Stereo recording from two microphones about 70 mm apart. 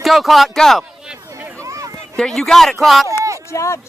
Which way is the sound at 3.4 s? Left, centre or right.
Left.